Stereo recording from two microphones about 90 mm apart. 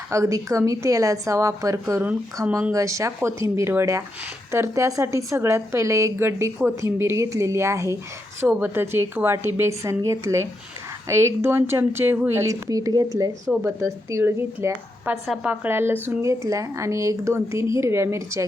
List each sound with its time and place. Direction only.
0.1 s a woman's voice: 35° right (ahead or behind)
12.5 s a woman's voice: 40° right (ahead or behind)